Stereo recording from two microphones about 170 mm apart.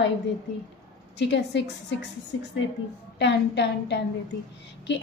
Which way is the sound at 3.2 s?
90° left.